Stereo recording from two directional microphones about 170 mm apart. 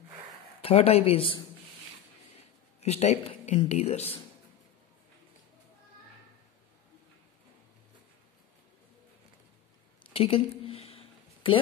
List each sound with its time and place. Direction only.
0.6 s speech: 35° left (ahead or behind)
2.8 s speech: 40° left (ahead or behind)
10.1 s a woman's voice: 35° left (ahead or behind)
10.6 s a sound: 35° left (ahead or behind)